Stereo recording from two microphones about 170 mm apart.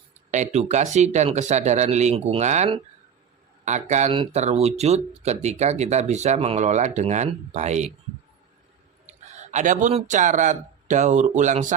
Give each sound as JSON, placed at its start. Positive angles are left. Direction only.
{"t": 0.3, "sound": "speech", "side_deg": -45}
{"t": 9.0, "sound": "speech", "side_deg": -45}